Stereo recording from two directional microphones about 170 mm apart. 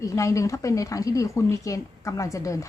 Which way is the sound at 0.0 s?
20° left (ahead or behind).